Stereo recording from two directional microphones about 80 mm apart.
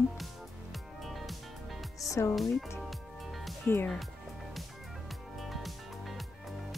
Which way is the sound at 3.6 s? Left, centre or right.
Left.